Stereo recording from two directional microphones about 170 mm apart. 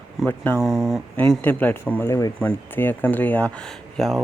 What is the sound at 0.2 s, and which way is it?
Speech, 10° left (ahead or behind).